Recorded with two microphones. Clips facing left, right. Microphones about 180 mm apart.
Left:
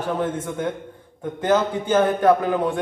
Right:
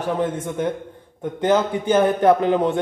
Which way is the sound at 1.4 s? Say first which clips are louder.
Right 1 dB; 20° right (ahead or behind).